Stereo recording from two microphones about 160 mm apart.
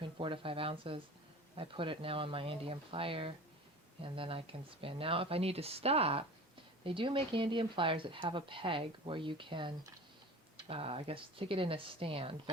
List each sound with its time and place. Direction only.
0.0 s speech: 35° right (ahead or behind)